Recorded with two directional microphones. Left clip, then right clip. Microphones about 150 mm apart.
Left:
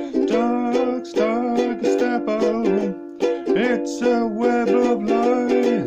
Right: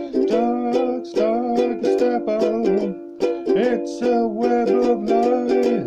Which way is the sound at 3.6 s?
5° left (ahead or behind).